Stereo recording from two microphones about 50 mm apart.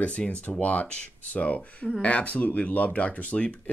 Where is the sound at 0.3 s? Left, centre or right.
Left.